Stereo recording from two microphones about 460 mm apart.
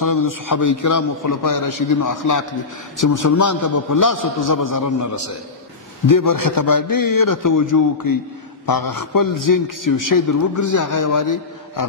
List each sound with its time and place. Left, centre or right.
0.0 s a man's voice: left